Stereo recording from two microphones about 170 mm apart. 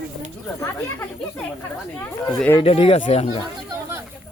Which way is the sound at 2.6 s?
35° left (ahead or behind).